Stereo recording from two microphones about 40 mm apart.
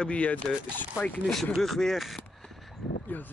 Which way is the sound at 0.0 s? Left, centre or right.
Left.